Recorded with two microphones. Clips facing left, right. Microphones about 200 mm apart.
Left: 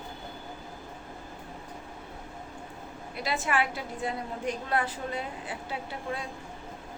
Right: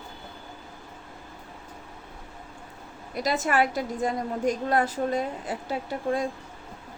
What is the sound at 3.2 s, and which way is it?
A woman's voice, 40° right (ahead or behind).